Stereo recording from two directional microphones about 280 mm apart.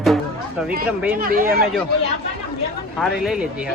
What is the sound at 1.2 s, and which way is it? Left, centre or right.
Speech, right.